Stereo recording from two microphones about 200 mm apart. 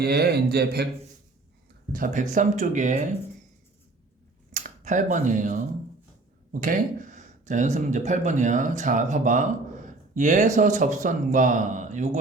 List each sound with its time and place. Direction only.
0.0 s speech: 50° right (ahead or behind)
1.9 s speech: 40° right (ahead or behind)
4.5 s speech: 40° right (ahead or behind)